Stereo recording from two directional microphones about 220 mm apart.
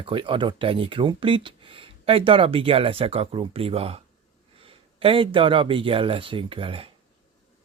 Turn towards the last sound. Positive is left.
turn(degrees=-25)  # may be behind; listen again after turning